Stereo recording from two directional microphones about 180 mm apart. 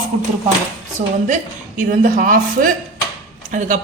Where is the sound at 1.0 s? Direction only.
45° right (ahead or behind).